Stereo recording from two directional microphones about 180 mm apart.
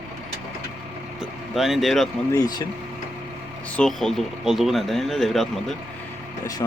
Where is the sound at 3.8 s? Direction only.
Centre (ahead or behind).